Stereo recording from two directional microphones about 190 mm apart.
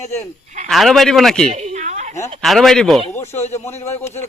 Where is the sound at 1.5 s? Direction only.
35° right (ahead or behind).